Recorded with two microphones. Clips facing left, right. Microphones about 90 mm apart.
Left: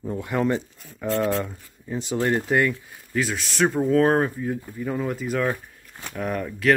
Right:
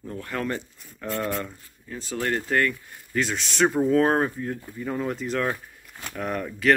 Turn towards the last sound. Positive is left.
turn(degrees=0)  # may be behind; listen again after turning